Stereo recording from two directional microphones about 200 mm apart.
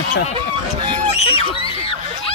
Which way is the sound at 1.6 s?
25° left (ahead or behind).